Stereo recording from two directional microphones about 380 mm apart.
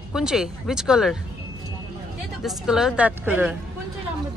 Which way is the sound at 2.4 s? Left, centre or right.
Centre.